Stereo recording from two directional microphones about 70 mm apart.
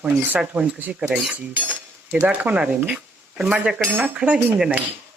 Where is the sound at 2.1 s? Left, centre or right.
Centre.